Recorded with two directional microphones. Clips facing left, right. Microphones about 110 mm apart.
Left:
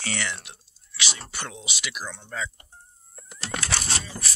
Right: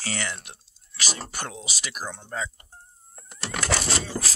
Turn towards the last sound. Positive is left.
turn(degrees=-90)